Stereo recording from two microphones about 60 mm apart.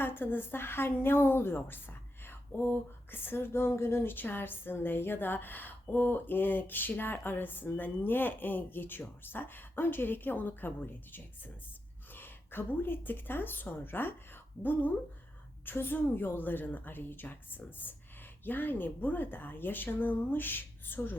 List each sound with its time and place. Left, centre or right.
0.0 s a woman's voice: left
5.8 s speech: left
6.1 s speech: left
12.1 s a woman's voice: left